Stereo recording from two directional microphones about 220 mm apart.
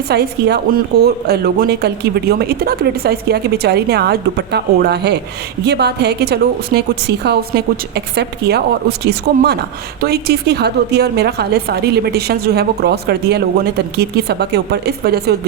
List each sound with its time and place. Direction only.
0.1 s a woman's voice: 45° right (ahead or behind)